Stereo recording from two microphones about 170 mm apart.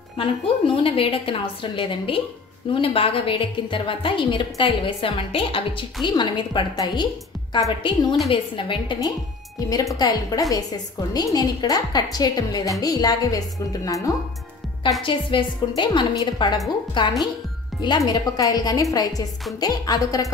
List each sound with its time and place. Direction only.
0.8 s a woman's voice: 30° left (ahead or behind)